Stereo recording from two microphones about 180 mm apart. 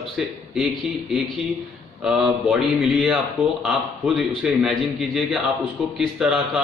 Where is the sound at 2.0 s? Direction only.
Centre (ahead or behind).